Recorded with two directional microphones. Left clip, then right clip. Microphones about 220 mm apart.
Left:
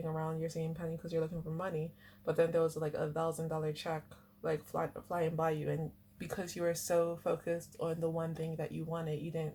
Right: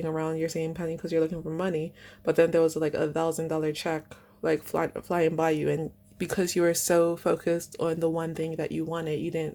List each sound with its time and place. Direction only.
0.0 s speech: 45° right (ahead or behind)